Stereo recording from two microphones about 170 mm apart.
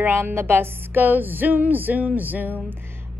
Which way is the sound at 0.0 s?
15° right (ahead or behind).